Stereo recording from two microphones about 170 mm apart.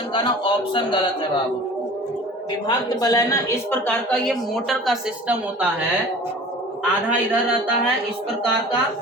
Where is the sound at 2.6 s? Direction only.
25° left (ahead or behind); by 5.4 s centre (ahead or behind).